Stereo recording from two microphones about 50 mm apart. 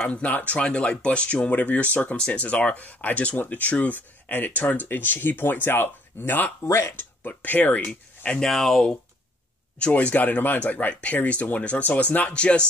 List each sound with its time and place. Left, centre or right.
0.3 s speech: left
6.7 s speech: left
7.0 s speech: left
8.4 s speech: centre
9.8 s speech: left